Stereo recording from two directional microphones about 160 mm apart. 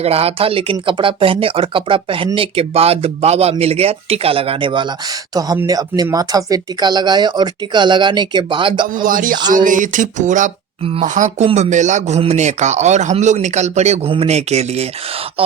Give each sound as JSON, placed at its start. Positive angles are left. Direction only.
{"t": 0.0, "sound": "speech", "side_deg": -40}
{"t": 8.9, "sound": "speech", "side_deg": -60}